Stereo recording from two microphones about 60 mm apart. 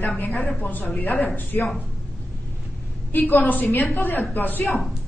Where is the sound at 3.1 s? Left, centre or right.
Left.